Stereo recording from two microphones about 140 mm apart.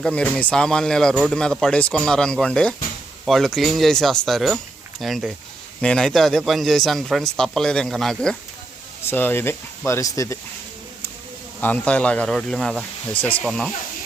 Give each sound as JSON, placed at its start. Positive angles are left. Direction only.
{"t": 0.0, "sound": "speech", "side_deg": 5}
{"t": 9.0, "sound": "speech", "side_deg": 15}
{"t": 11.6, "sound": "speech", "side_deg": 10}